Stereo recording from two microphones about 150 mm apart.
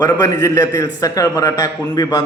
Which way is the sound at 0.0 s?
25° left (ahead or behind).